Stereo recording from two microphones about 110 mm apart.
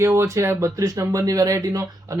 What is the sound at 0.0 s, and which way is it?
Speech, 25° right (ahead or behind).